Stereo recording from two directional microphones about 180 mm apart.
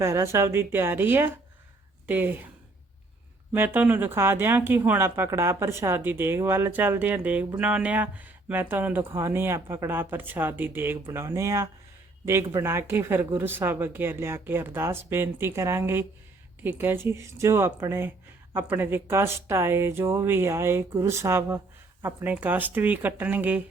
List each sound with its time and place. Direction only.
0.0 s speech: 15° right (ahead or behind)
3.5 s speech: 10° right (ahead or behind)